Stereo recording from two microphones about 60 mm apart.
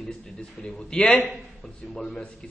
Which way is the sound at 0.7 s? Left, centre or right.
Centre.